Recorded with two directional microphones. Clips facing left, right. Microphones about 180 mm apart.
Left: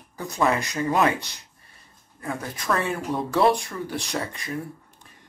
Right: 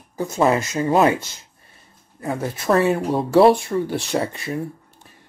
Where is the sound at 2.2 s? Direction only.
30° right (ahead or behind).